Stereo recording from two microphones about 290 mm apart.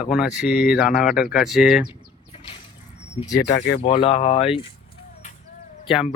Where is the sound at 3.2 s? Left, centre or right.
Centre.